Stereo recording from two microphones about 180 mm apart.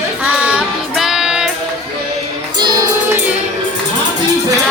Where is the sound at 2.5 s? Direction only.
25° right (ahead or behind).